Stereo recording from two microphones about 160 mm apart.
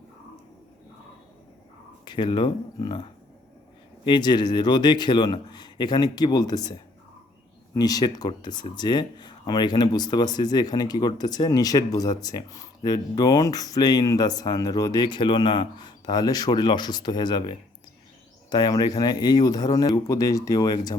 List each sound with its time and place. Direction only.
2.0 s speech: 30° left (ahead or behind)
18.5 s speech: 25° left (ahead or behind)